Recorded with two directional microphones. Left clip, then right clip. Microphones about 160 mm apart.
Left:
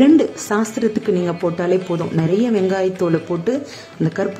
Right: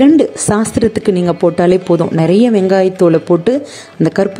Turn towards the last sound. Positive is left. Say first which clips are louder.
# right 8 dB
turn(degrees=-40)  # may be behind; listen again after turning